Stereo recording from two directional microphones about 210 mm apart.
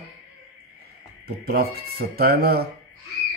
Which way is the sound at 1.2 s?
50° right (ahead or behind).